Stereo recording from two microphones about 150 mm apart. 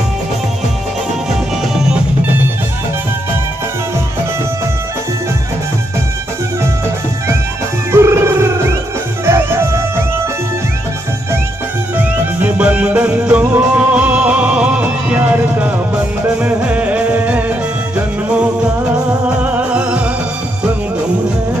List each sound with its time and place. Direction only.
7.9 s music: 15° right (ahead or behind)
12.0 s music: 10° right (ahead or behind)